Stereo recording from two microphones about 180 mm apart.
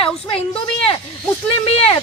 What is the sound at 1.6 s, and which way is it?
Speech, 30° left (ahead or behind).